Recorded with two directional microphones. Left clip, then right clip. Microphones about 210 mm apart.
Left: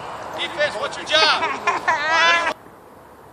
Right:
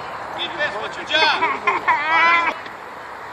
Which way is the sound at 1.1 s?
15° left (ahead or behind).